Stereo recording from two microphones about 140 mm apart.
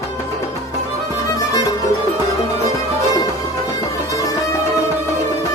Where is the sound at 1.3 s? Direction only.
25° left (ahead or behind).